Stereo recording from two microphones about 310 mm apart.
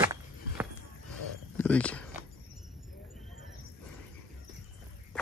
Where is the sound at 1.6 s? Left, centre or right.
Centre.